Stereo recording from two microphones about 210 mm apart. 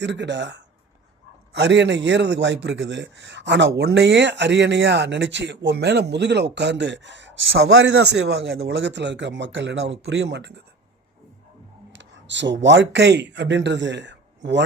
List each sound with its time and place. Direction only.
0.0 s speech: 55° right (ahead or behind)
11.9 s speech: 60° right (ahead or behind)